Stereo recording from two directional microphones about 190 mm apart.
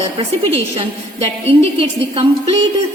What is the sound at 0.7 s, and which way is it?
A woman's voice, 35° right (ahead or behind).